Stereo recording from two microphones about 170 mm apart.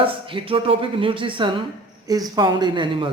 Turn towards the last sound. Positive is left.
turn(degrees=-25)  # may be behind; listen again after turning